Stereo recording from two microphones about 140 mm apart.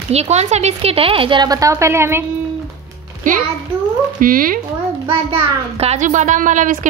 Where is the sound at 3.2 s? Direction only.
70° right (ahead or behind).